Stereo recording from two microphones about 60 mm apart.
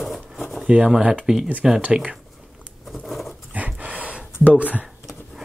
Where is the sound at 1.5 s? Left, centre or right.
Right.